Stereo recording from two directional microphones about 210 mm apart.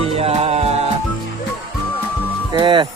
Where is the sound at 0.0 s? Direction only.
30° right (ahead or behind).